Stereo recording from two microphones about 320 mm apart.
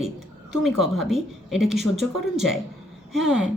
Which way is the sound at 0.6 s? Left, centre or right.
Centre.